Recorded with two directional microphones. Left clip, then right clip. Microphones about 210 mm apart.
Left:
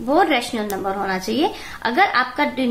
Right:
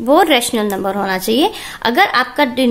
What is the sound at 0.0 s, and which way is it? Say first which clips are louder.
A woman's voice: right 6 dB; 45° right (ahead or behind).